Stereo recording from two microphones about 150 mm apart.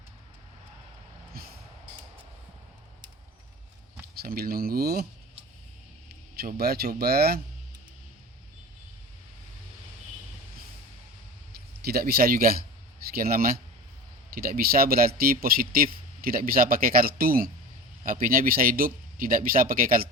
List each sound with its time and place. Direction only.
1.3 s vehicle: 90° right
4.2 s speech: 85° right
6.6 s speech: 90° right
11.9 s a man's voice: 85° right